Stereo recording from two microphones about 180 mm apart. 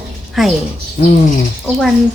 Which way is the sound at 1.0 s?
60° left (ahead or behind).